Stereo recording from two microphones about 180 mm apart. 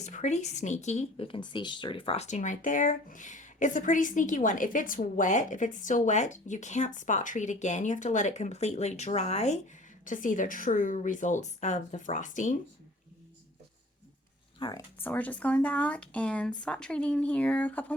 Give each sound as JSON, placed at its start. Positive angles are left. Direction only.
{"t": 0.0, "sound": "a woman's voice", "side_deg": 40}
{"t": 14.6, "sound": "speech", "side_deg": 20}